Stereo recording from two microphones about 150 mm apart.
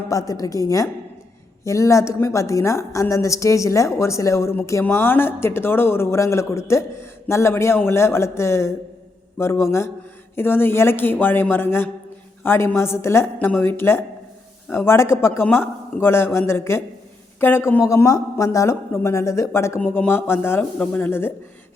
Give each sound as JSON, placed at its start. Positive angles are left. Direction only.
{"t": 0.1, "sound": "a woman's voice", "side_deg": 25}